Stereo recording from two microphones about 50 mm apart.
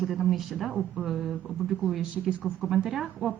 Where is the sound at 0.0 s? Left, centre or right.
Centre.